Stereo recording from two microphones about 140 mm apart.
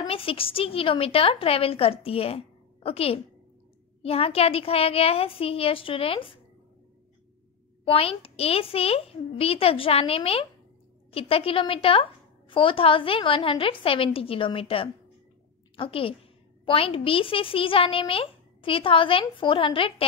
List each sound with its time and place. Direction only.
0.0 s a woman's voice: 40° left (ahead or behind)
7.8 s a woman's voice: 40° left (ahead or behind)